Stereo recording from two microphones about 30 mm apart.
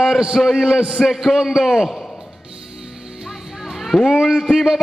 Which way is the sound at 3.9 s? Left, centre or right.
Left.